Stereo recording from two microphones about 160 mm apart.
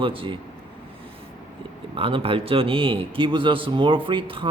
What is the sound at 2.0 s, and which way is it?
A man's voice, 35° right (ahead or behind).